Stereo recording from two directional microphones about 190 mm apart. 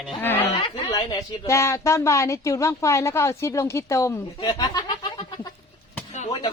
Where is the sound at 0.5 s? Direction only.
25° left (ahead or behind).